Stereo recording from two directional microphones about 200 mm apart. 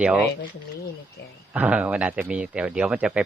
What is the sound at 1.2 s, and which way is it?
Speech, 55° left (ahead or behind).